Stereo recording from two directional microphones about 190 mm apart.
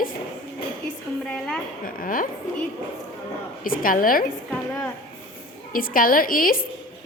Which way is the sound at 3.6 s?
45° left (ahead or behind).